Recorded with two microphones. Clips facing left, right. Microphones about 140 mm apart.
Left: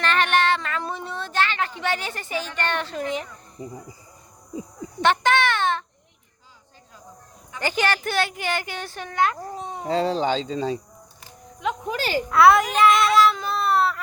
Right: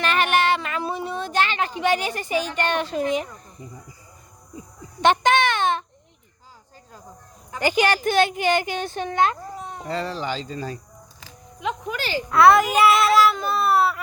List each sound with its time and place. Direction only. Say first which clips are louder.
0.0 s a sound: right 1 dB; 10° right (ahead or behind)
2.6 s a child's voice: right 3 dB; 15° right (ahead or behind)
3.6 s speech: left 7 dB; 35° left (ahead or behind)
5.0 s a sound: right 2 dB; 15° right (ahead or behind)
7.6 s a child's voice: right 4 dB; 15° right (ahead or behind)
9.6 s speech: left 4 dB; 25° left (ahead or behind)
11.9 s speech: left 4 dB; 40° left (ahead or behind)
12.3 s speech: right 1 dB; centre (ahead or behind)